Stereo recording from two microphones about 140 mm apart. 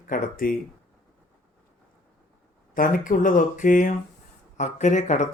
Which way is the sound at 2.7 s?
75° left (ahead or behind).